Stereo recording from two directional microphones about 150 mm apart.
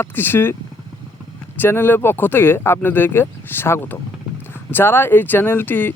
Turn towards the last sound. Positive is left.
turn(degrees=15)  # may be behind; listen again after turning